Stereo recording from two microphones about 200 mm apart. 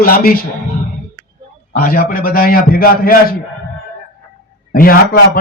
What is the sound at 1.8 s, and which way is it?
Speech, 50° left (ahead or behind).